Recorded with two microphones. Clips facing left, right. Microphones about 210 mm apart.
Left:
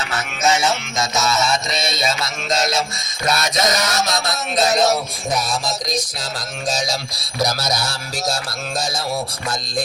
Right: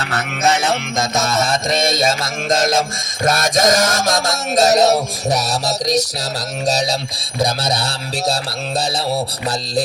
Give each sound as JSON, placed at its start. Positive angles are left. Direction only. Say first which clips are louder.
{"t": 0.0, "sound": "music", "louder": "right 2 dB", "side_deg": -60}
{"t": 6.7, "sound": "music", "louder": "right 4 dB", "side_deg": -35}